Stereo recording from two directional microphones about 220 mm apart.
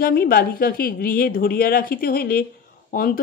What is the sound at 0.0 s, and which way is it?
Speech, 40° left (ahead or behind).